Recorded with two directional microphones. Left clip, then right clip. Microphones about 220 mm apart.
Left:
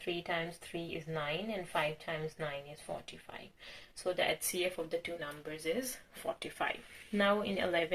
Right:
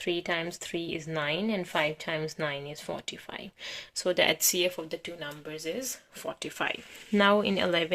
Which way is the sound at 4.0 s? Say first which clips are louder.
Right 8 dB; 50° right (ahead or behind).